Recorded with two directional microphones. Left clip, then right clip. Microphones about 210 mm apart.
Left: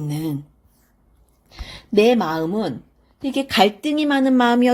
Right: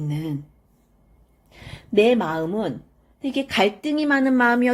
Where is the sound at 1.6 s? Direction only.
35° left (ahead or behind).